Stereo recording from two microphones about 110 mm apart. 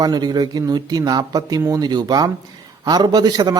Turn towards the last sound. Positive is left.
turn(degrees=-35)  # may be behind; listen again after turning